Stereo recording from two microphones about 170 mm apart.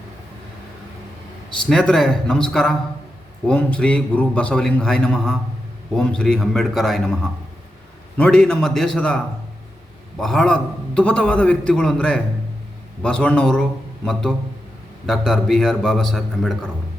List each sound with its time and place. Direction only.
1.7 s a man's voice: 5° left (ahead or behind)